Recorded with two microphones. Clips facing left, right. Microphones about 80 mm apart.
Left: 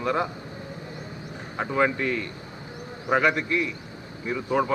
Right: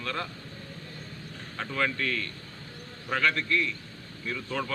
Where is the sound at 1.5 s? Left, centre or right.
Left.